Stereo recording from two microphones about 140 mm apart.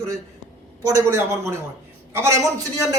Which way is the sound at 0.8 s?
20° right (ahead or behind).